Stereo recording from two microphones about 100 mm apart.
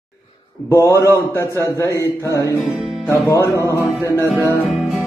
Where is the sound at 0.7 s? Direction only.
30° left (ahead or behind).